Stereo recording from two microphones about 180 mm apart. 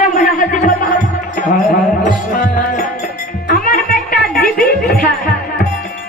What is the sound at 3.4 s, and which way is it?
Music, 50° left (ahead or behind).